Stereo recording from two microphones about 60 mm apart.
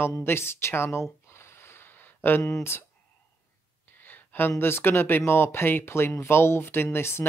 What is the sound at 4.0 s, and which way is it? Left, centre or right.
Speech, left.